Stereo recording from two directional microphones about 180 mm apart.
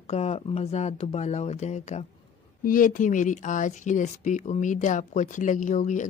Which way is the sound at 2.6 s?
50° left (ahead or behind).